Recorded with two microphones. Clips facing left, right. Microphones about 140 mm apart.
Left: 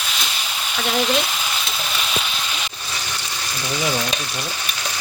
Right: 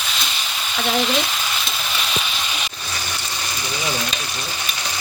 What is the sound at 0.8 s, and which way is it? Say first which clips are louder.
Speech: even; centre (ahead or behind).